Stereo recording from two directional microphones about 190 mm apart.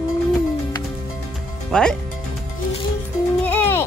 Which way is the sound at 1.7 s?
5° left (ahead or behind).